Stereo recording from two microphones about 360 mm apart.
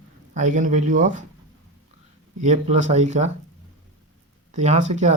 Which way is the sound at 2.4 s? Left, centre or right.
Centre.